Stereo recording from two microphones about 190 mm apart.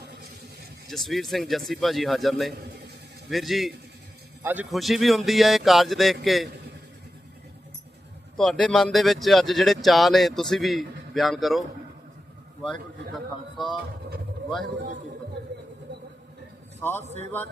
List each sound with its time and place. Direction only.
0.9 s speech: centre (ahead or behind)
8.4 s speech: 5° left (ahead or behind)
15.9 s a sound: 65° right (ahead or behind)
16.8 s a man's voice: 10° left (ahead or behind)